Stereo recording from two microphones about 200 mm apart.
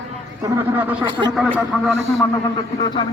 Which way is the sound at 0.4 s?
15° right (ahead or behind).